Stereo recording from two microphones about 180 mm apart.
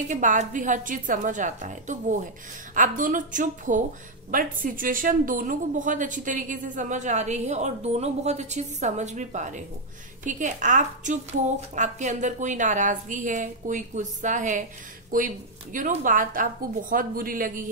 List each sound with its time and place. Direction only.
0.1 s a woman's voice: 45° right (ahead or behind)